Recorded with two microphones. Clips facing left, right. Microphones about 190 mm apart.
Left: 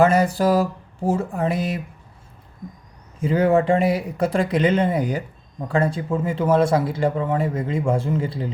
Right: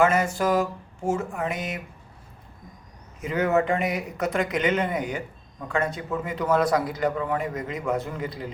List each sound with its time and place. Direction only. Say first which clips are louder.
0.0 s speech: left 5 dB; 35° left (ahead or behind)
3.2 s speech: left 5 dB; 30° left (ahead or behind)